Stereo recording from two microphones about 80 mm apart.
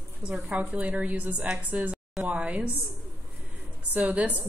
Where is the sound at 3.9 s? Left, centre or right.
Centre.